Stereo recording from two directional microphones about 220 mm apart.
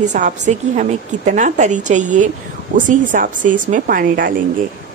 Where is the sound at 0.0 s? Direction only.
35° right (ahead or behind).